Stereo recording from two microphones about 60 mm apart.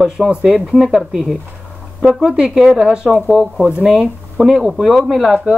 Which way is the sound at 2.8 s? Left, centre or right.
Centre.